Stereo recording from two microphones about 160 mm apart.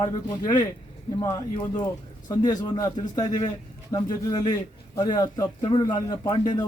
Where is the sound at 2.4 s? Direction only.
25° left (ahead or behind).